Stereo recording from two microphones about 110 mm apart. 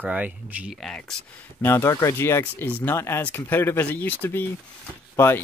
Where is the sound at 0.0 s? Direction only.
15° right (ahead or behind).